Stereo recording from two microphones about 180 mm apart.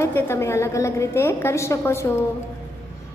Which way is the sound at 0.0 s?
15° left (ahead or behind).